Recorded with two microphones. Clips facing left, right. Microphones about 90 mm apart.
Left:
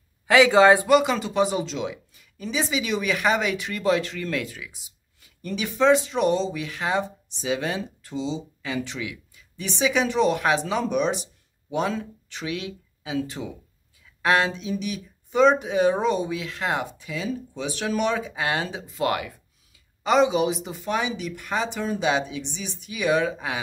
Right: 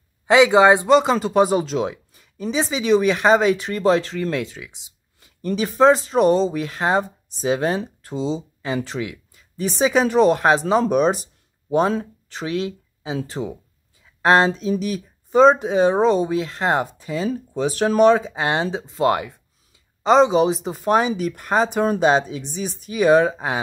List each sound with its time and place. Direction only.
0.3 s speech: 20° right (ahead or behind)
1.1 s speech: 40° right (ahead or behind)